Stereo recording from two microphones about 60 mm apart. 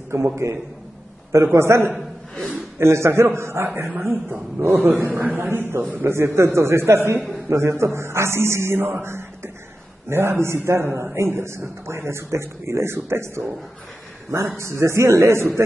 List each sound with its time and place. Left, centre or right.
0.1 s a man's voice: right
14.6 s speech: right